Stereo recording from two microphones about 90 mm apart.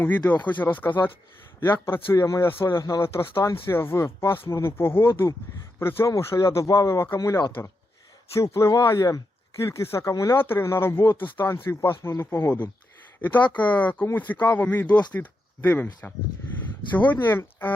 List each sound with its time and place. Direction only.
0.0 s speech: 20° left (ahead or behind); by 9.6 s 40° left (ahead or behind)
9.6 s speech: 30° left (ahead or behind)